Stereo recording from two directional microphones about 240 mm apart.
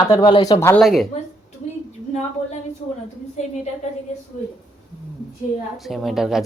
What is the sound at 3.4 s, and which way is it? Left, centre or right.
Speech, left.